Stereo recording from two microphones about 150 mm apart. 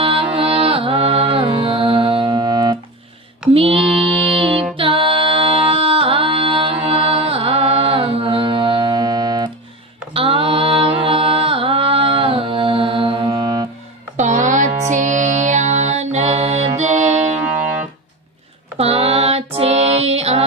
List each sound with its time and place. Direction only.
0.0 s music: 35° right (ahead or behind)
2.2 s music: 25° right (ahead or behind)
3.5 s music: 35° right (ahead or behind)
6.8 s mantra: 40° right (ahead or behind)
13.3 s music: 25° right (ahead or behind)
14.2 s music: 55° right (ahead or behind)
18.8 s female singing: 40° right (ahead or behind)
19.5 s music: 45° right (ahead or behind)